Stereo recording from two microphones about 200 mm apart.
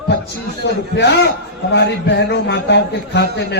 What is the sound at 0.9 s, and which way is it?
A man's voice, 60° left (ahead or behind).